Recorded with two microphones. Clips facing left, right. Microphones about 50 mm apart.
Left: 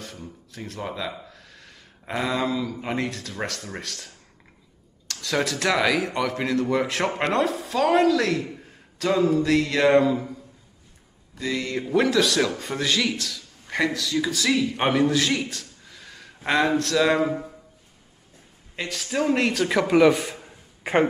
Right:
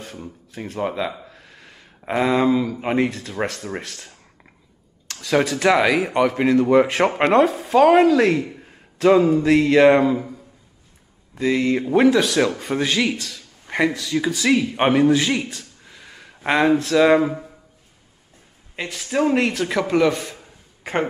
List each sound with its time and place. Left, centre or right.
0.0 s speech: right
11.3 s speech: right
15.5 s a sound: right
16.4 s speech: centre
17.2 s speech: centre
18.8 s a man's voice: centre